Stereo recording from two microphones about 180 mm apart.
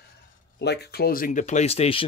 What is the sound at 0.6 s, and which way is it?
Speech, 65° left (ahead or behind).